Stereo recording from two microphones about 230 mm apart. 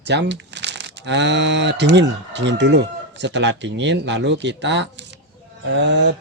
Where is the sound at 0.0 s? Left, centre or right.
Right.